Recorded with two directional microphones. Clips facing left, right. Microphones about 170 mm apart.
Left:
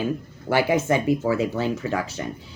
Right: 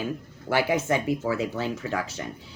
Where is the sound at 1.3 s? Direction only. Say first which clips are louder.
Left 4 dB; 10° left (ahead or behind).